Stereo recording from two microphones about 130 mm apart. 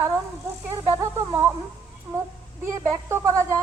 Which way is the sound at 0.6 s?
20° right (ahead or behind).